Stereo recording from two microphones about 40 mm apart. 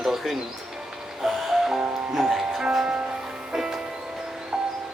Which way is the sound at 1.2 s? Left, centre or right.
Centre.